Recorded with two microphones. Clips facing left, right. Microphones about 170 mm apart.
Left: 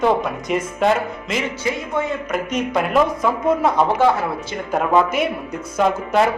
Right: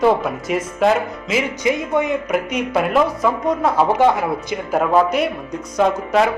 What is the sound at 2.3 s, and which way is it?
Speech, 5° right (ahead or behind).